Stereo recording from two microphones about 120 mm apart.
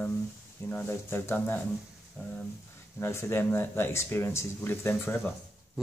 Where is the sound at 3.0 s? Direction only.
20° left (ahead or behind).